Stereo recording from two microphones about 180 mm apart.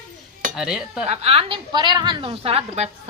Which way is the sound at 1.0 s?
35° right (ahead or behind).